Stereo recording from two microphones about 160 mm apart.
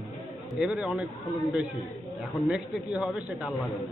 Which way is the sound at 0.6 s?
Centre (ahead or behind).